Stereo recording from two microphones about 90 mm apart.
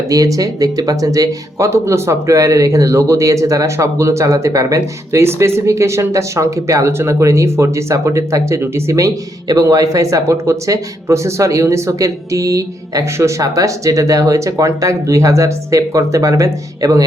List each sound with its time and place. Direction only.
0.1 s speech: 40° right (ahead or behind)